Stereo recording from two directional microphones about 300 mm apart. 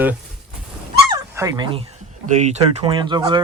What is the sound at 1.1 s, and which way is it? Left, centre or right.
Speech, centre.